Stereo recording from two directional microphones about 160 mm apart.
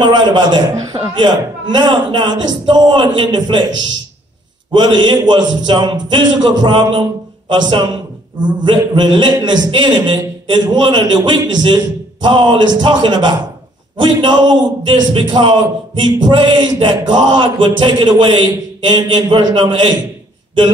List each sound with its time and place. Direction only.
0.0 s a man's voice: 30° right (ahead or behind)
4.7 s a man's voice: 30° right (ahead or behind)